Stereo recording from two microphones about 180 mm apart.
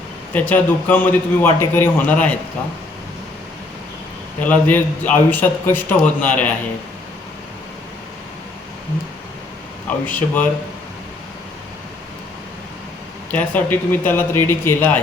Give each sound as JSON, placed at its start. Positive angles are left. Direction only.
{"t": 0.3, "sound": "a man's voice", "side_deg": 10}
{"t": 4.4, "sound": "a man's voice", "side_deg": 10}
{"t": 9.8, "sound": "speech", "side_deg": 10}
{"t": 13.3, "sound": "a man's voice", "side_deg": 10}